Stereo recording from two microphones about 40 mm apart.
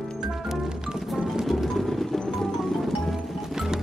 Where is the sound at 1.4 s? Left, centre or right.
Centre.